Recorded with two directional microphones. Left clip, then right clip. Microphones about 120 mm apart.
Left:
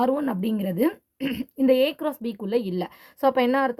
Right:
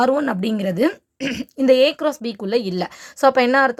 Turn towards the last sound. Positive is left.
turn(degrees=-30)  # may be behind; listen again after turning